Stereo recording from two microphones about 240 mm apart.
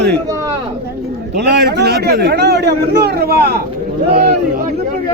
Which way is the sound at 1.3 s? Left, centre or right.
Right.